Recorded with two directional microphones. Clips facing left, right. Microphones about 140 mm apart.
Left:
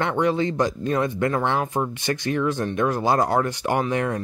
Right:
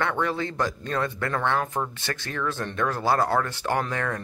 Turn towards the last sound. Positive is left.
turn(degrees=20)  # may be behind; listen again after turning